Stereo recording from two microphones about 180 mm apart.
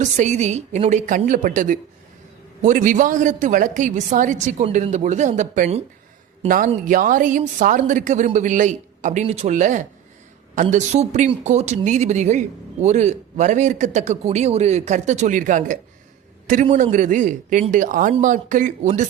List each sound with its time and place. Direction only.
0.0 s a woman's voice: 40° right (ahead or behind)
6.8 s a woman's voice: 50° right (ahead or behind)